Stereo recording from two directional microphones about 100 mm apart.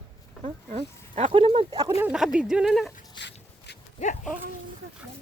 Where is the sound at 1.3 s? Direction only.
65° right (ahead or behind).